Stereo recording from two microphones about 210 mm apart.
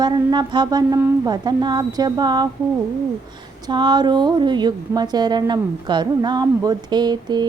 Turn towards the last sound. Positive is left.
turn(degrees=-20)  # may be behind; listen again after turning